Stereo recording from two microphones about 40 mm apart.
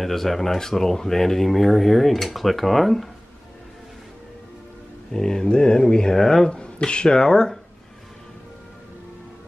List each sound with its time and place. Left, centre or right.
0.0 s speech: centre
5.1 s speech: centre
6.5 s speech: left